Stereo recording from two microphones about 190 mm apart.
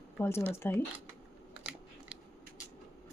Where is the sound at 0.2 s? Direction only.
15° left (ahead or behind).